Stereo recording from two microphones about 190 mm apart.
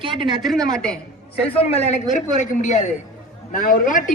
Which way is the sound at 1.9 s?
40° left (ahead or behind).